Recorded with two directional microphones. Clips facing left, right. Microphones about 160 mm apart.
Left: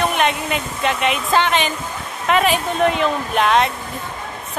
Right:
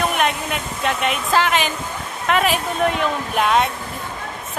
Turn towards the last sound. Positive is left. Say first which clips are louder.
# left 2 dB
turn(degrees=-5)  # may be behind; listen again after turning